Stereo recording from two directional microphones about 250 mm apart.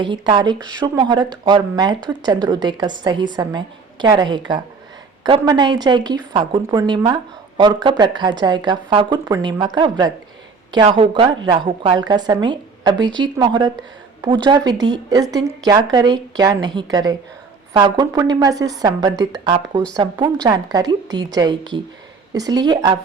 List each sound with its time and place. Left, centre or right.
0.0 s speech: centre